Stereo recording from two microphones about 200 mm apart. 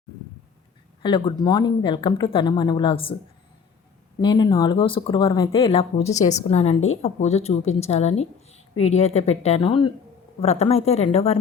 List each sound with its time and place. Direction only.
1.0 s speech: 25° left (ahead or behind)
4.2 s a woman's voice: 20° left (ahead or behind)